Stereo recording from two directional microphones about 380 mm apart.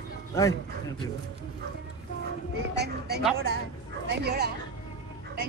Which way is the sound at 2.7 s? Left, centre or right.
Right.